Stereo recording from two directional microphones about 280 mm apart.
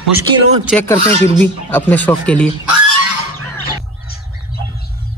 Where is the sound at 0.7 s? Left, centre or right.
Centre.